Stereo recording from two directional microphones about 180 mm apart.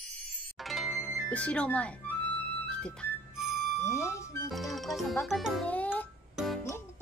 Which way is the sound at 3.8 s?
15° left (ahead or behind).